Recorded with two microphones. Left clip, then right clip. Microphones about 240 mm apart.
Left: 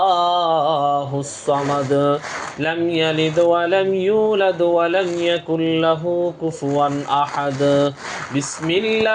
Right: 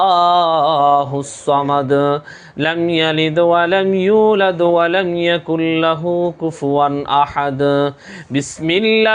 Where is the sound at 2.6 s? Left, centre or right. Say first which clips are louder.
Right 4 dB; right.